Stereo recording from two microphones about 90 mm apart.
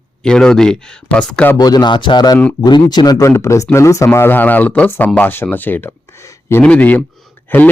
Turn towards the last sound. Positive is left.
turn(degrees=20)  # may be behind; listen again after turning